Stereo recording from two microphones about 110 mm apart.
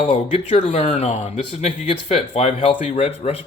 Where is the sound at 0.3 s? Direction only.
90° left.